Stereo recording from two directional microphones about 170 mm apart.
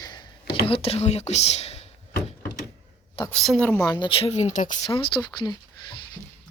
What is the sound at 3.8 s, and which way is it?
Speech, 25° left (ahead or behind).